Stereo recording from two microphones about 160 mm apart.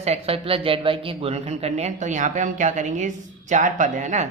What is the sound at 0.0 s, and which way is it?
A man's voice, 40° right (ahead or behind).